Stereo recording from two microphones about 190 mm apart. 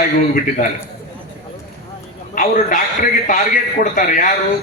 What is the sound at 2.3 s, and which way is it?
A man's voice, 45° left (ahead or behind).